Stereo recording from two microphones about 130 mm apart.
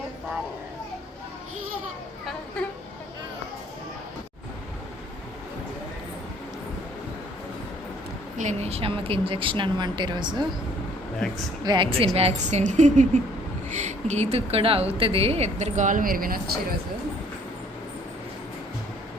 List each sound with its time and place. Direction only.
8.4 s speech: 60° right (ahead or behind); by 10.4 s 35° right (ahead or behind)
11.6 s a woman's voice: 35° right (ahead or behind); by 16.4 s 90° right